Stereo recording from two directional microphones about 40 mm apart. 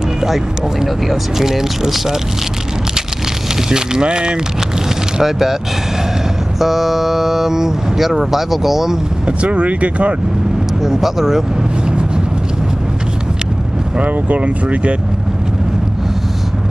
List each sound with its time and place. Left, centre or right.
0.2 s speech: centre
3.6 s speech: centre
5.1 s speech: centre
6.6 s speech: centre
9.4 s speech: right
10.8 s speech: centre
13.9 s speech: right